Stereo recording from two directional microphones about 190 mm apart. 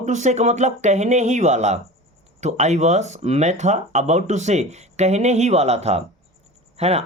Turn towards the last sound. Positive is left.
turn(degrees=-35)  # may be behind; listen again after turning